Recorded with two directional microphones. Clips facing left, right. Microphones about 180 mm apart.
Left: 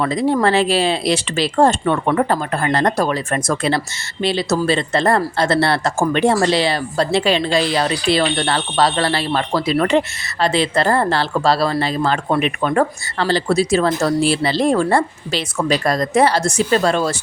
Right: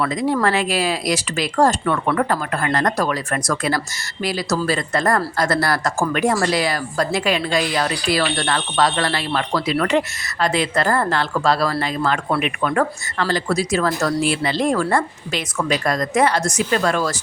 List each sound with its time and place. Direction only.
0.0 s speech: 30° left (ahead or behind)